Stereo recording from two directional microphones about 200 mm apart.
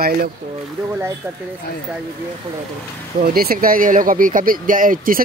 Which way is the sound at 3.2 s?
45° right (ahead or behind).